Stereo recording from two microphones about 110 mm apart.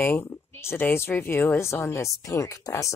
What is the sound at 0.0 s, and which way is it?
Speech, 20° left (ahead or behind).